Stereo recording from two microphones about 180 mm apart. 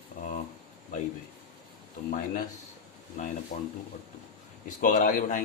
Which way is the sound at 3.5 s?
40° left (ahead or behind).